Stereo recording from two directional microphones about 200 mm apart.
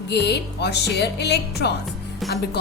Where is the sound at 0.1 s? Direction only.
55° left (ahead or behind).